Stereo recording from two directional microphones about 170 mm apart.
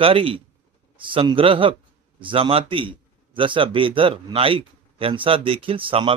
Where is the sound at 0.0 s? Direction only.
30° right (ahead or behind).